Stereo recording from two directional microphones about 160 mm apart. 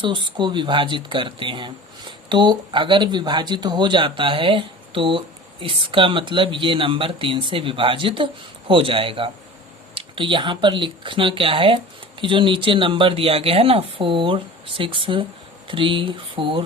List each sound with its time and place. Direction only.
0.0 s speech: 30° right (ahead or behind)